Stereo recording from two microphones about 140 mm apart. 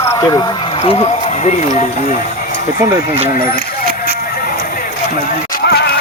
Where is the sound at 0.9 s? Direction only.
45° left (ahead or behind).